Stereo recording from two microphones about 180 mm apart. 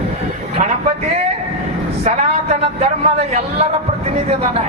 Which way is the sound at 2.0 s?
40° right (ahead or behind).